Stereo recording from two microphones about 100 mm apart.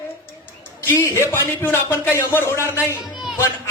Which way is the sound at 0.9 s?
25° left (ahead or behind).